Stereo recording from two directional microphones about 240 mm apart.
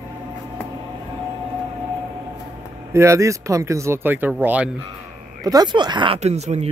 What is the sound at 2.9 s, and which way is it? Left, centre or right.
Speech, centre.